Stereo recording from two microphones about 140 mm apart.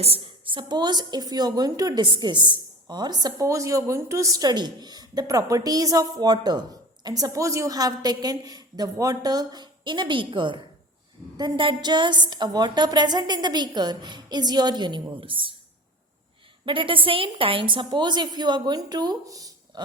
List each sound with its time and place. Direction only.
0.0 s a woman's voice: 40° right (ahead or behind)
16.6 s a woman's voice: 40° right (ahead or behind)